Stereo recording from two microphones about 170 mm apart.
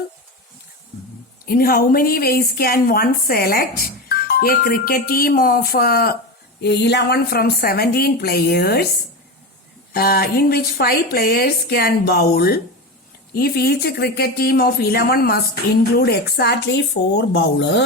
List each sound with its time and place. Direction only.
1.5 s a woman's voice: 60° left (ahead or behind)
6.6 s a woman's voice: 80° left
9.9 s a woman's voice: 65° left (ahead or behind); by 17.8 s 90° left